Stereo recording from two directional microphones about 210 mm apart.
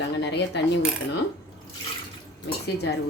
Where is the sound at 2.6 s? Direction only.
55° left (ahead or behind).